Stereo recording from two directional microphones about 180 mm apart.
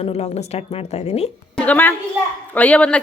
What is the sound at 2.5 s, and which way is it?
Speech, 10° left (ahead or behind).